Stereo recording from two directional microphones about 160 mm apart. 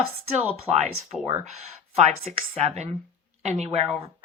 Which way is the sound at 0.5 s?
45° right (ahead or behind).